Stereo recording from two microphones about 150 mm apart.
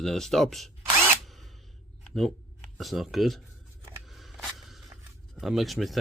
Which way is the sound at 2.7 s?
Centre (ahead or behind).